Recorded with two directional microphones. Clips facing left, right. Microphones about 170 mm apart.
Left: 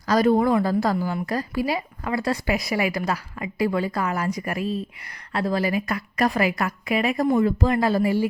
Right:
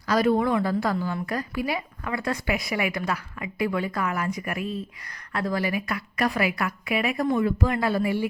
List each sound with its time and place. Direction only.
0.1 s a woman's voice: 40° left (ahead or behind)
5.3 s a woman's voice: 25° left (ahead or behind)